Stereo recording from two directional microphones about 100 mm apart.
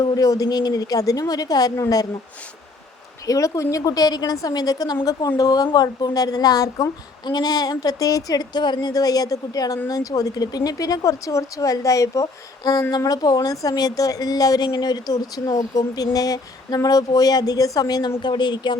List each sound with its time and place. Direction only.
0.0 s a woman's voice: 40° left (ahead or behind)
3.2 s a woman's voice: 35° left (ahead or behind)